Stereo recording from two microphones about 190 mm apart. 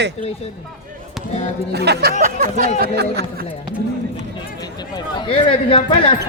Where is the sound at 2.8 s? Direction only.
60° right (ahead or behind).